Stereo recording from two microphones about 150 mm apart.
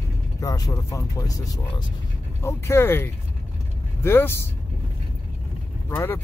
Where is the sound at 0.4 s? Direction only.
25° left (ahead or behind).